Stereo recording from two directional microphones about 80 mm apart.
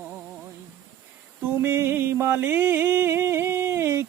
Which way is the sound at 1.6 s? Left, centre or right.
Right.